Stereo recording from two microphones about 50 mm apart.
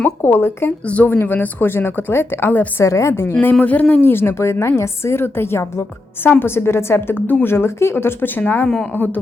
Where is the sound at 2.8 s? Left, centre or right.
Left.